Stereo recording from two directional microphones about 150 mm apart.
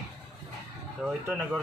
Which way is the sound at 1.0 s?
10° right (ahead or behind).